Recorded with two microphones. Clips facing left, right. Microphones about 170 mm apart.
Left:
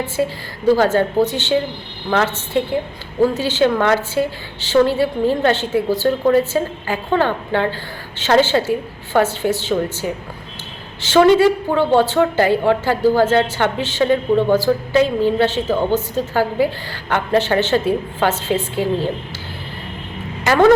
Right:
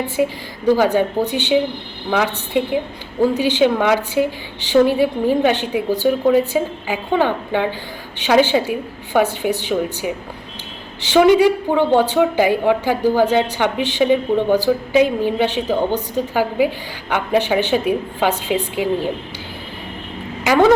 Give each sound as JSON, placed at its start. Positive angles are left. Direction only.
{"t": 0.7, "sound": "a woman's voice", "side_deg": -15}
{"t": 20.4, "sound": "speech", "side_deg": -15}